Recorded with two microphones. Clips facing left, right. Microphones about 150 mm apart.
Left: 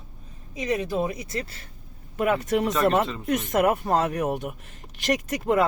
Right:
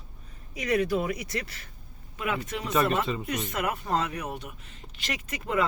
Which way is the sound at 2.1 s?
45° left (ahead or behind).